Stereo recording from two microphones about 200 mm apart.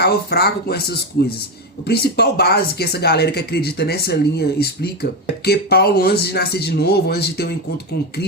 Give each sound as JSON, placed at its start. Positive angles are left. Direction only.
{"t": 0.0, "sound": "speech", "side_deg": 55}